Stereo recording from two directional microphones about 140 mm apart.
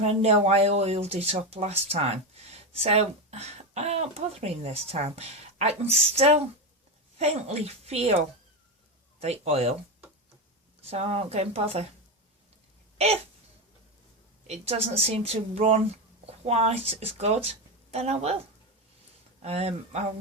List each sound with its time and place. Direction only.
0.0 s speech: 50° right (ahead or behind)
9.2 s speech: 50° right (ahead or behind)
10.8 s speech: 45° right (ahead or behind)
14.4 s speech: 50° right (ahead or behind)
19.4 s speech: 50° right (ahead or behind)